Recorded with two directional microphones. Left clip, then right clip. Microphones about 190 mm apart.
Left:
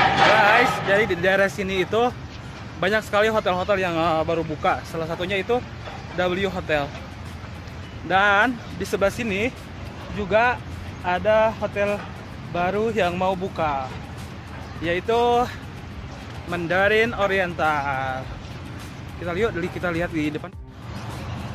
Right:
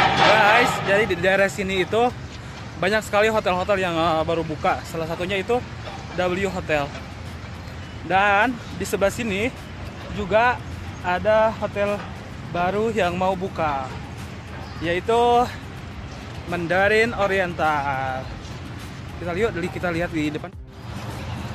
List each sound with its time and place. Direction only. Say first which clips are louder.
0.0 s music: even; 25° left (ahead or behind)
0.6 s a sound: even; 25° left (ahead or behind)
0.8 s speech: even; centre (ahead or behind)
8.1 s speech: even; 10° left (ahead or behind)
14.8 s speech: right 1 dB; 15° right (ahead or behind)
16.4 s speech: right 1 dB; centre (ahead or behind)
19.2 s speech: even; centre (ahead or behind)